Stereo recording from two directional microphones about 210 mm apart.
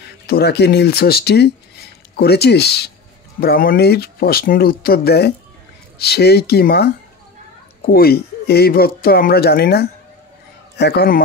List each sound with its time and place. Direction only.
0.0 s speech: 50° left (ahead or behind)